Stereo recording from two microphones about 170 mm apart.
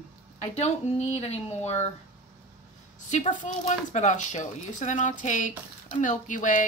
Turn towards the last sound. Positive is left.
turn(degrees=50)  # may be behind; listen again after turning